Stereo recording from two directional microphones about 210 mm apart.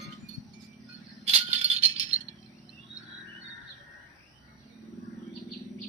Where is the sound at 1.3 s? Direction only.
30° right (ahead or behind).